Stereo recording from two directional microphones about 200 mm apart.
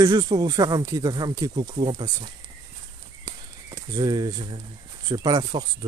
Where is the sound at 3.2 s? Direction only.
20° right (ahead or behind).